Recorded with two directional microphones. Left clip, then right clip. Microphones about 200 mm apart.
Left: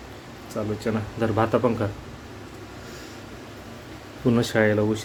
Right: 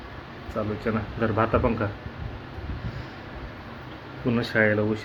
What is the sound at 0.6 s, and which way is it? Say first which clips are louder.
Speech: even; 10° left (ahead or behind).